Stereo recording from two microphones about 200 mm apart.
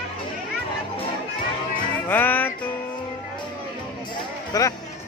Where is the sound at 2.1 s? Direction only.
10° left (ahead or behind).